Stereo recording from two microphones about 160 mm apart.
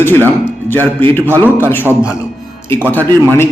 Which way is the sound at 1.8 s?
10° right (ahead or behind).